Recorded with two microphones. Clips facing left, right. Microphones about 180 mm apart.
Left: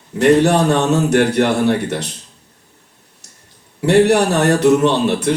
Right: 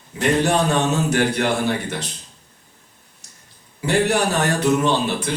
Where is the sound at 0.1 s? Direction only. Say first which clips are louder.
Left 7 dB; 60° left (ahead or behind).